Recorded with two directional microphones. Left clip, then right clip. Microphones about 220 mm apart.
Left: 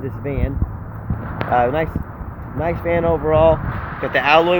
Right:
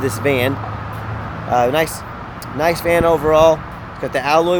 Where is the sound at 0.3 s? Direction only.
25° right (ahead or behind).